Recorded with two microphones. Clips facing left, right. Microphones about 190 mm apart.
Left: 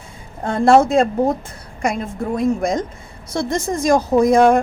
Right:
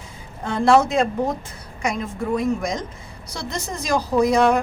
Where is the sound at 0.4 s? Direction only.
50° left (ahead or behind).